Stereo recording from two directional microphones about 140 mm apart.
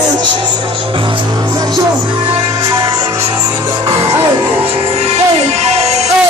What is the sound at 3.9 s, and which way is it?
Music, 45° right (ahead or behind).